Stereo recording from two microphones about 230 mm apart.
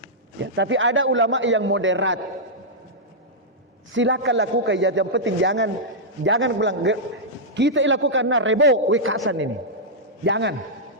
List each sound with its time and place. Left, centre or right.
0.5 s a man's voice: right
3.9 s a man's voice: right